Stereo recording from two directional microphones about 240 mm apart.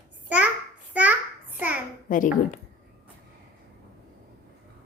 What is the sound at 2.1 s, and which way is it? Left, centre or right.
Speech, left.